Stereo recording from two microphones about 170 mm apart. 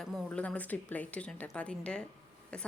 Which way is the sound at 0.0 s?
5° left (ahead or behind).